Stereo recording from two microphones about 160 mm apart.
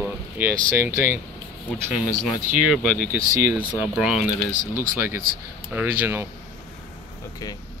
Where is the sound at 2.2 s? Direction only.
5° right (ahead or behind).